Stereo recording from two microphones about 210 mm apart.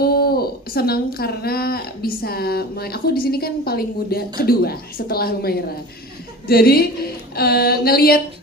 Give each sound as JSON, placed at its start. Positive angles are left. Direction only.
{"t": 0.0, "sound": "a woman's voice", "side_deg": 45}